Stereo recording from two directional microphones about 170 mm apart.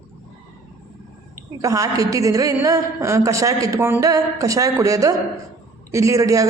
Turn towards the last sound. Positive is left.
turn(degrees=-20)  # may be behind; listen again after turning